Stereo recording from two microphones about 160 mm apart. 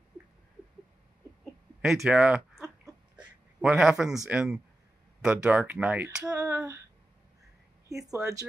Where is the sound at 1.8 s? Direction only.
Centre (ahead or behind).